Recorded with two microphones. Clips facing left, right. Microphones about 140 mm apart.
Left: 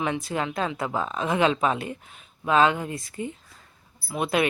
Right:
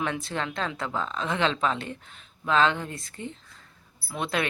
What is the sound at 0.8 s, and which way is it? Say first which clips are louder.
Speech: left 3 dB; 15° left (ahead or behind).